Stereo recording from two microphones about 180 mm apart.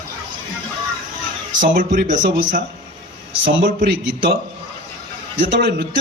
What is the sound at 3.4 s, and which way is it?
Speech, 70° right (ahead or behind).